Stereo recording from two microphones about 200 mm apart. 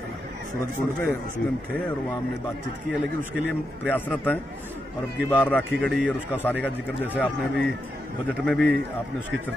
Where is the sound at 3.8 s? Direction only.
10° left (ahead or behind).